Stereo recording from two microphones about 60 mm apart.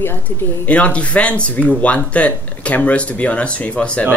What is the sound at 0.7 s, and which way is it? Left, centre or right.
Speech, left.